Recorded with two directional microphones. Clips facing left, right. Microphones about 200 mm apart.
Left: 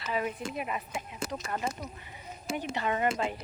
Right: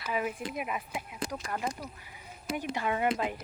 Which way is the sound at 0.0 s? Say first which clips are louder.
Even; 10° right (ahead or behind).